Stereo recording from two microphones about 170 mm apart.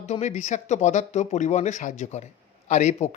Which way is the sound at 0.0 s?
40° left (ahead or behind).